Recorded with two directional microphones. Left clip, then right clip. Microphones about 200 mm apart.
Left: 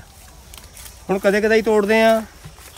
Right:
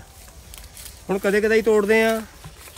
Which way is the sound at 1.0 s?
10° right (ahead or behind).